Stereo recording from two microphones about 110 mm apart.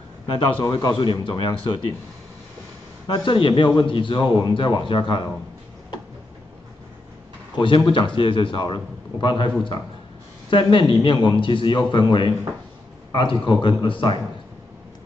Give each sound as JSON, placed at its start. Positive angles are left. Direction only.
{"t": 0.3, "sound": "a man's voice", "side_deg": 45}
{"t": 3.1, "sound": "a man's voice", "side_deg": 50}
{"t": 7.5, "sound": "a man's voice", "side_deg": 45}